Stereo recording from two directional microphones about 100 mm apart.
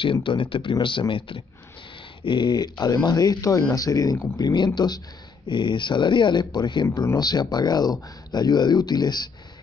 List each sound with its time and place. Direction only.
0.0 s speech: 55° left (ahead or behind)